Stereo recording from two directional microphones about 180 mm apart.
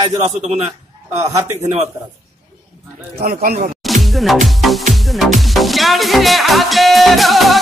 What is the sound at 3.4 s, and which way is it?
Speech, 55° right (ahead or behind).